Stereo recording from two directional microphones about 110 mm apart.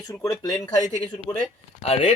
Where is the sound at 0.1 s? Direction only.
30° left (ahead or behind).